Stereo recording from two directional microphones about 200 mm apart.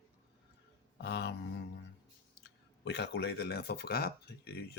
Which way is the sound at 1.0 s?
60° left (ahead or behind).